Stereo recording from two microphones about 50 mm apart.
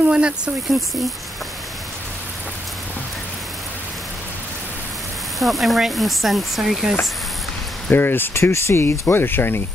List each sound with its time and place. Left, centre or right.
0.0 s speech: right
5.4 s speech: centre
7.9 s speech: left
8.4 s speech: left
9.0 s speech: left